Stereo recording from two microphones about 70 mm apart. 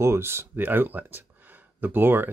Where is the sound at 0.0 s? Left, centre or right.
Right.